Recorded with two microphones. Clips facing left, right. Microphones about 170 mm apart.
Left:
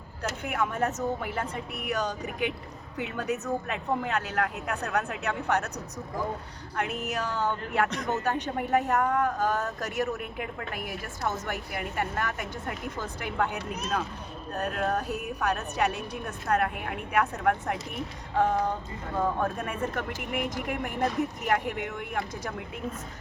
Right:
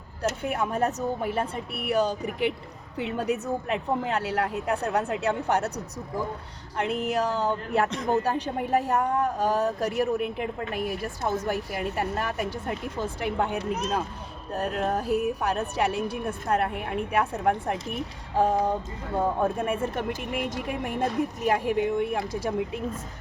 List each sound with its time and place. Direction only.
0.2 s speech: 30° right (ahead or behind)
6.7 s speech: 30° right (ahead or behind)